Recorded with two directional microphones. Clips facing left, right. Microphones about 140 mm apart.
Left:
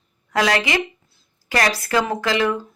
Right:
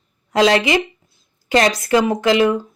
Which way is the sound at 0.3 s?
25° right (ahead or behind).